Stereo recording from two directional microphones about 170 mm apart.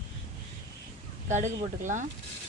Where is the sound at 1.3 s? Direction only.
45° right (ahead or behind).